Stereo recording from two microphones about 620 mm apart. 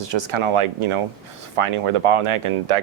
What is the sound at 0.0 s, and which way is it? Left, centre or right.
Speech, right.